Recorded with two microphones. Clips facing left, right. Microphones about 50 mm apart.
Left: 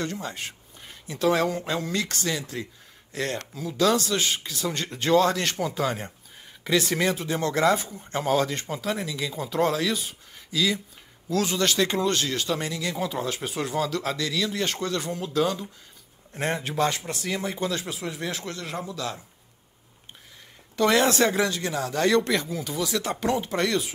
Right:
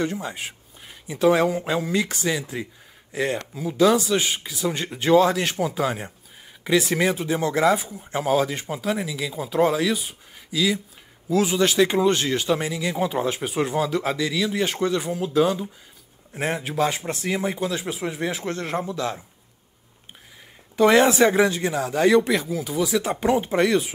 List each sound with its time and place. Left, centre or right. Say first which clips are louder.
0.0 s a man's voice: right 4 dB; centre
16.9 s speech: right 4 dB; right
17.6 s a man's voice: right 2 dB; centre
17.8 s speech: right 5 dB; right
20.7 s a man's voice: right 5 dB; centre